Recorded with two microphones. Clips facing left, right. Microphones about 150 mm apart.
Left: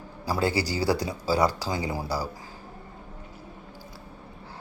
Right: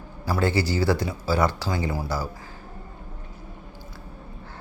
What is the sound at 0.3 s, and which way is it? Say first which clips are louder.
Speech: right 2 dB; 10° left (ahead or behind).